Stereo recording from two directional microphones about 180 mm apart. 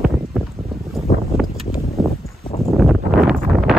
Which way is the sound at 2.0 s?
Centre (ahead or behind).